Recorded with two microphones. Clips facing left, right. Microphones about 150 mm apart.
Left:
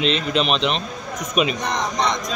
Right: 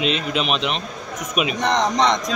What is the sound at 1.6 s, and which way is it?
Speech, 90° right.